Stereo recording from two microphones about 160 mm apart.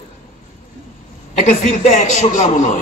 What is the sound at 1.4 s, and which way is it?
Mantra, 50° left (ahead or behind).